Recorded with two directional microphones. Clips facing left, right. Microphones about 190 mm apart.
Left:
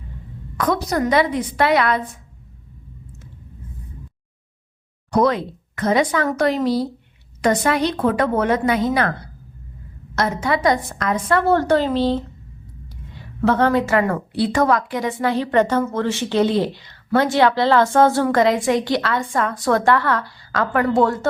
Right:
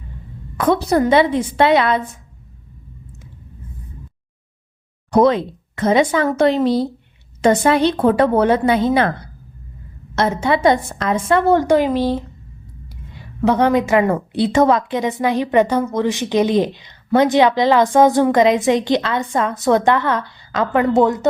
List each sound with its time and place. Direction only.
0.5 s a woman's voice: 25° right (ahead or behind)
5.1 s a woman's voice: 25° right (ahead or behind)
10.2 s a woman's voice: 25° right (ahead or behind)